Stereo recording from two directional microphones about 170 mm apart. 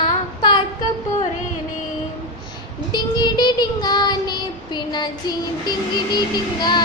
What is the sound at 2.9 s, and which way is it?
Child singing, 25° left (ahead or behind).